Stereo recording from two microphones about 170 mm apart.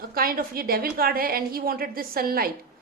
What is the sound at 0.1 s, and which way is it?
A woman's voice, 60° right (ahead or behind).